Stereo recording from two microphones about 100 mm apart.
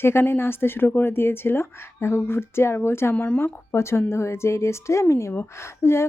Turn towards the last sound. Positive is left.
turn(degrees=25)  # may be behind; listen again after turning